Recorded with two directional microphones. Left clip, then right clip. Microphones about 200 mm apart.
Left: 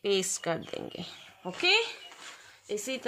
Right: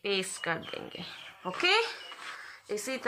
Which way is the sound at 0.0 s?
65° left (ahead or behind).